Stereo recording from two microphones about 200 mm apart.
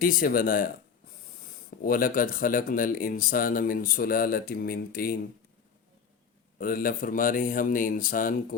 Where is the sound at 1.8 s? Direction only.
45° left (ahead or behind).